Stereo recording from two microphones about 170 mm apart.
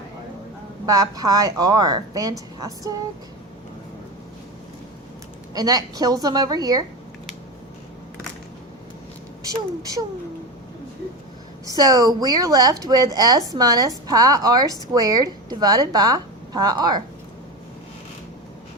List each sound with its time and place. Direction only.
0.9 s a woman's voice: 20° right (ahead or behind)
5.5 s a woman's voice: 20° right (ahead or behind)
11.6 s a woman's voice: 20° right (ahead or behind)